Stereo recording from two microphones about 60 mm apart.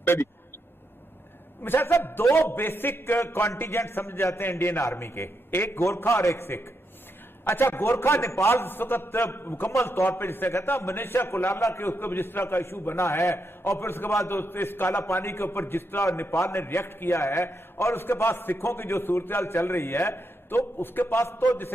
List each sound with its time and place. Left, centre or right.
0.0 s speech: left
1.6 s a man's voice: left
6.0 s a man's voice: left
9.7 s a man's voice: left
10.0 s a man's voice: left
16.0 s a man's voice: left
16.5 s a man's voice: left